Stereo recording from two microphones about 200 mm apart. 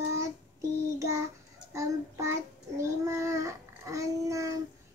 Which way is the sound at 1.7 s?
15° right (ahead or behind).